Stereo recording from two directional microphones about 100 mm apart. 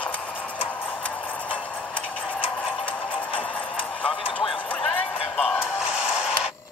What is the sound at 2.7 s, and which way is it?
Music, 60° left (ahead or behind).